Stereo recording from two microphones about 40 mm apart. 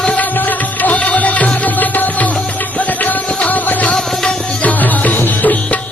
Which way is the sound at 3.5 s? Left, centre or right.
Left.